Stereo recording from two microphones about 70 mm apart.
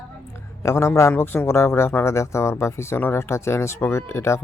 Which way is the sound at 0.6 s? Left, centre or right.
Left.